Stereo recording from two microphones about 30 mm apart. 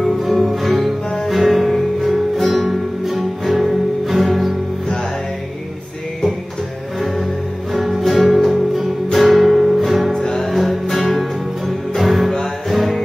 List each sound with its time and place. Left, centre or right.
0.2 s music: centre
7.7 s music: centre
10.1 s music: centre
10.5 s music: centre
12.3 s music: centre
12.7 s music: centre